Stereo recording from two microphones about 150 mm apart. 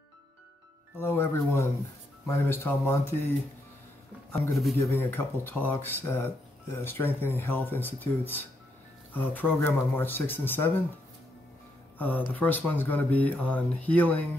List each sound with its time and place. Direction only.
1.0 s speech: 15° left (ahead or behind)
4.4 s a man's voice: centre (ahead or behind)
4.9 s speech: 15° left (ahead or behind)
12.4 s speech: 10° left (ahead or behind)